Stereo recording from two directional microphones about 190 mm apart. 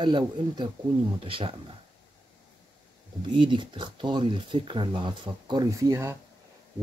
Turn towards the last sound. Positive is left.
turn(degrees=-15)  # may be behind; listen again after turning